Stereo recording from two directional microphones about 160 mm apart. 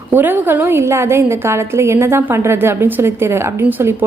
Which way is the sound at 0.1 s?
10° right (ahead or behind).